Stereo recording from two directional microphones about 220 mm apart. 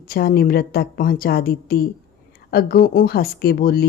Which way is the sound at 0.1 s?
45° left (ahead or behind).